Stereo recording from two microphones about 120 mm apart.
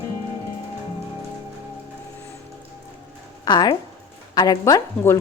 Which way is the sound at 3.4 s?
35° left (ahead or behind).